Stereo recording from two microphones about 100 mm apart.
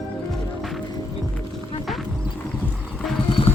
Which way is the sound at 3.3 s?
65° left (ahead or behind).